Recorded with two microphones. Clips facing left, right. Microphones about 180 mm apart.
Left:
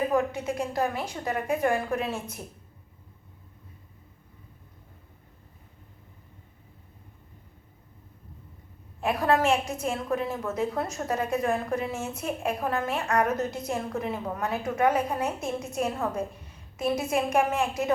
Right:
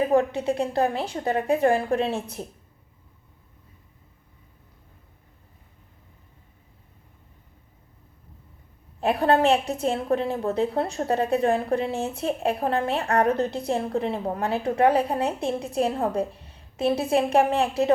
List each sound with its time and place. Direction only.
0.1 s a woman's voice: 30° right (ahead or behind)
9.0 s a woman's voice: 35° right (ahead or behind)